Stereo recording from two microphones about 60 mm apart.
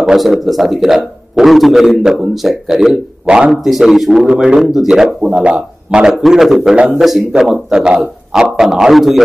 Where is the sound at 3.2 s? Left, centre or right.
Centre.